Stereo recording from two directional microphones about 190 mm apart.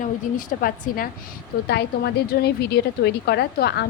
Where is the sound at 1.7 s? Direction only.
60° left (ahead or behind).